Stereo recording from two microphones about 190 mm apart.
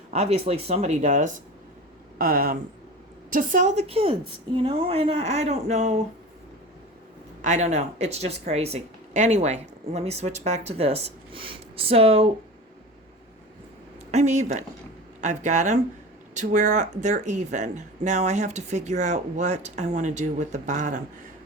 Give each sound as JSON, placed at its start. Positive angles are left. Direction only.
{"t": 0.1, "sound": "speech", "side_deg": -35}
{"t": 7.4, "sound": "speech", "side_deg": -40}
{"t": 14.1, "sound": "speech", "side_deg": -35}